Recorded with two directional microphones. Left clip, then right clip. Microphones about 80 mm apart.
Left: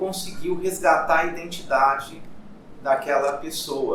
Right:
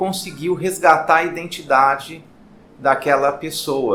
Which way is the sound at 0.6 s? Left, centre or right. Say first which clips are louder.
Right 5 dB; right.